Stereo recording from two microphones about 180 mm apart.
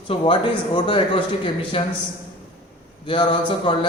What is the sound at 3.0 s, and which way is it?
Speech, 25° left (ahead or behind).